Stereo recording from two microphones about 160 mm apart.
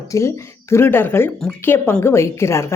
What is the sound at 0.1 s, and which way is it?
Speech, 20° left (ahead or behind).